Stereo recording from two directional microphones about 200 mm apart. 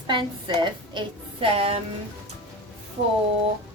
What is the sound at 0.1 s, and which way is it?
A woman's voice, 25° right (ahead or behind).